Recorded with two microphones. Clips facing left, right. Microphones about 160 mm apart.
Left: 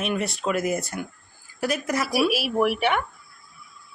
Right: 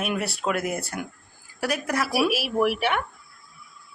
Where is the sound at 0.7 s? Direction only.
60° right (ahead or behind).